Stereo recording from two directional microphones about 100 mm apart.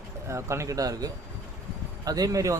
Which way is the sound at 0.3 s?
30° right (ahead or behind).